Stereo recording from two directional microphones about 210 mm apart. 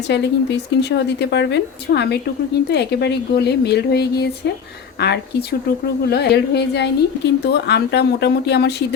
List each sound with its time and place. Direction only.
0.1 s a woman's voice: 55° left (ahead or behind)